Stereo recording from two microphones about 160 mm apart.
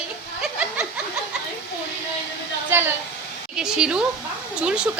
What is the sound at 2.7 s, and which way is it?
A woman's voice, 15° right (ahead or behind).